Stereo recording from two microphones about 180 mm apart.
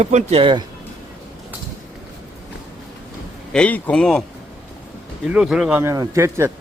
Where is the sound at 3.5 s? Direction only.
5° left (ahead or behind).